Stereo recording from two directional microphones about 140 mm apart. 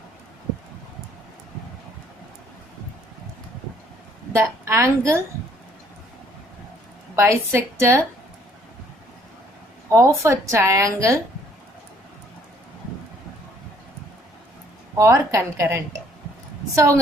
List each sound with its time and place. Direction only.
4.3 s a woman's voice: 20° right (ahead or behind)
7.2 s a woman's voice: 20° right (ahead or behind)
9.9 s a woman's voice: 20° right (ahead or behind)
14.9 s a woman's voice: 20° right (ahead or behind)